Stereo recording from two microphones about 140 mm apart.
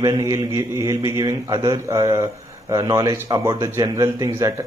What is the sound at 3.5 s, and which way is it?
Speech, 30° right (ahead or behind).